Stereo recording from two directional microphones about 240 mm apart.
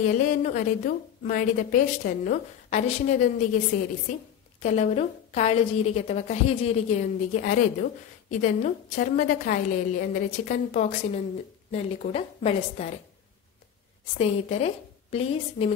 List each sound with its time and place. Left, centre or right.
0.0 s a woman's voice: left
14.1 s a woman's voice: left